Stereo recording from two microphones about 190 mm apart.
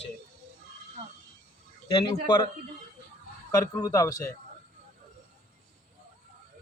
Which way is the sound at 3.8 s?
20° left (ahead or behind).